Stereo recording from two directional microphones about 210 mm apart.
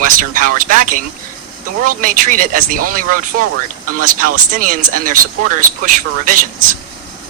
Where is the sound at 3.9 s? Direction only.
40° right (ahead or behind).